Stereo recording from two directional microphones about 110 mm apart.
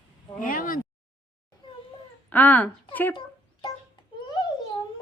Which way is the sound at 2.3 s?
15° left (ahead or behind).